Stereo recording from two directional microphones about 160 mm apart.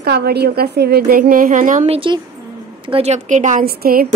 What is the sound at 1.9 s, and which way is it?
A woman's voice, 35° right (ahead or behind).